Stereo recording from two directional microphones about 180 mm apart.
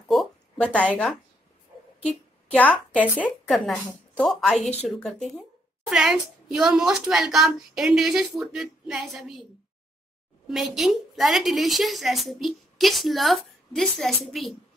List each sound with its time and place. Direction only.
0.1 s a sound: 5° left (ahead or behind)
2.0 s a woman's voice: 5° left (ahead or behind)
10.5 s a woman's voice: centre (ahead or behind)